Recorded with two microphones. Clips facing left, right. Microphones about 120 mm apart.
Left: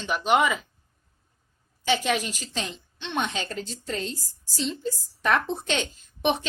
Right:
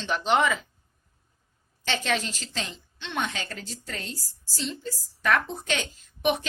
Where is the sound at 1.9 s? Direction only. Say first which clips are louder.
Left 3 dB; 15° left (ahead or behind).